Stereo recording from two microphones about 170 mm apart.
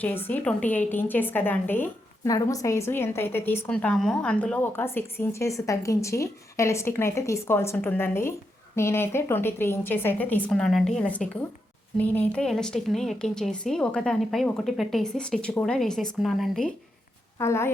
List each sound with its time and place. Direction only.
0.3 s a woman's voice: 10° left (ahead or behind)
17.3 s speech: 15° left (ahead or behind)